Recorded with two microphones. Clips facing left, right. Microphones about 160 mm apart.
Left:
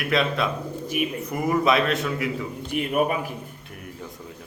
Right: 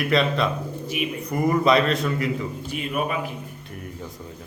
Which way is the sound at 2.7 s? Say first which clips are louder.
Left 6 dB; 60° left (ahead or behind).